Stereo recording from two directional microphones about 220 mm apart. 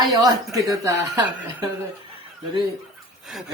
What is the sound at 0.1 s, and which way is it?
Speech, 20° right (ahead or behind).